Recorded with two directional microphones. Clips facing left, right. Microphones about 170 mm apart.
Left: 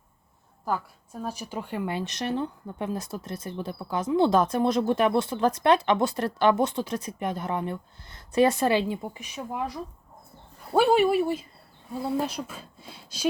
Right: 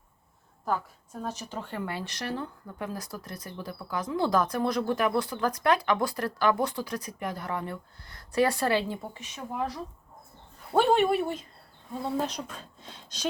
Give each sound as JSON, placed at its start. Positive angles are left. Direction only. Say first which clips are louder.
{"t": 1.2, "sound": "speech", "louder": "left 2 dB", "side_deg": 10}